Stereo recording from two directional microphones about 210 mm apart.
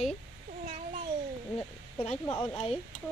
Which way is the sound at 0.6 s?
35° right (ahead or behind).